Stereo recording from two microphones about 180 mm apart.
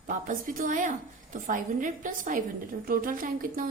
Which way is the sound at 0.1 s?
45° right (ahead or behind).